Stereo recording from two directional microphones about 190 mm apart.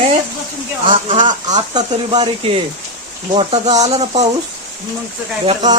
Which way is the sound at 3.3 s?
30° right (ahead or behind).